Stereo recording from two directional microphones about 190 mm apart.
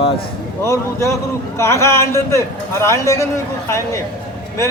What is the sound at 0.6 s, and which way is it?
A man's voice, 15° left (ahead or behind).